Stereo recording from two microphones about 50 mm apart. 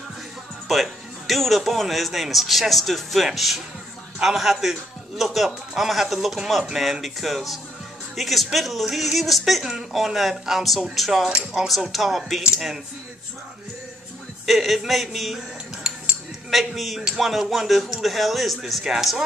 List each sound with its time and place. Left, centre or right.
0.7 s a man's voice: centre
11.2 s speech: centre
11.6 s a man's voice: centre
14.4 s a man's voice: centre